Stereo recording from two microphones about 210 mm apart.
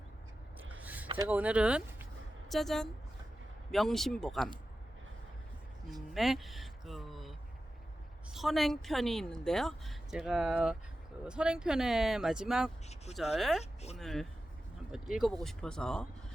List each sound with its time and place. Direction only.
0.8 s a sound: 5° right (ahead or behind)
1.1 s speech: 10° right (ahead or behind)
5.9 s music: centre (ahead or behind)
8.3 s speech: centre (ahead or behind)